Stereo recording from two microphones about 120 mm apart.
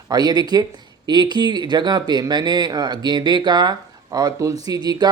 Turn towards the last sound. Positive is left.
turn(degrees=-35)  # may be behind; listen again after turning